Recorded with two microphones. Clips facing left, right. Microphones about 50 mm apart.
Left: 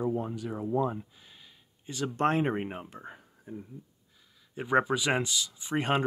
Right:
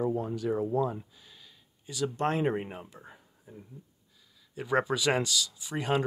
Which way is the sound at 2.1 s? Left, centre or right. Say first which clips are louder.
Left 2 dB; left.